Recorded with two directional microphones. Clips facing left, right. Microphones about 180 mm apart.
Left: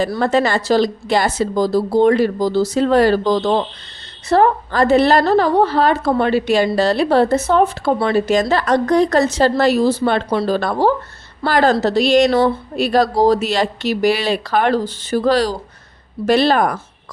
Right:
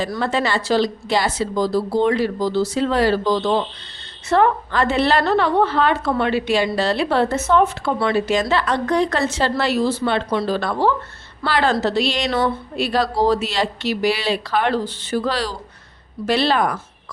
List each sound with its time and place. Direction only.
0.2 s a woman's voice: 45° left (ahead or behind)